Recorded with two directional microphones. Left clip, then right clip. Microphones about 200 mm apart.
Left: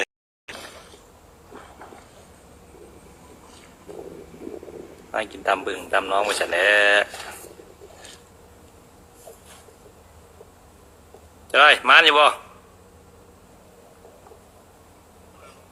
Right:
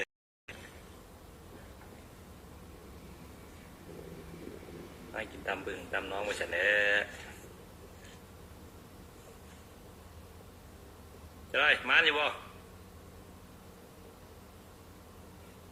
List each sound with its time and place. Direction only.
0.0 s a sound: 40° left (ahead or behind)
5.1 s a man's voice: 40° left (ahead or behind)
11.5 s a man's voice: 45° left (ahead or behind)